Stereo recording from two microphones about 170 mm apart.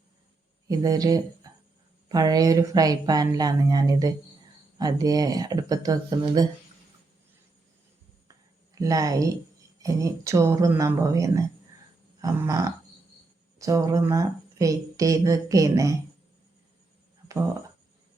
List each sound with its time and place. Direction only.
0.7 s speech: 20° right (ahead or behind)
8.7 s speech: 20° right (ahead or behind)
17.2 s a sound: 20° right (ahead or behind)